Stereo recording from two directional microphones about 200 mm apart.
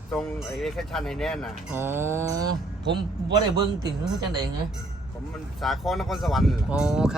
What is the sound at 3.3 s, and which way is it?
Speech, 20° right (ahead or behind).